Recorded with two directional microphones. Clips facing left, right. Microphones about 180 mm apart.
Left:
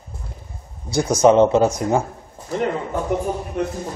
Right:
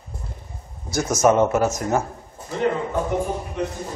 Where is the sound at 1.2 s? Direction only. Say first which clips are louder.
Left 4 dB; 20° left (ahead or behind).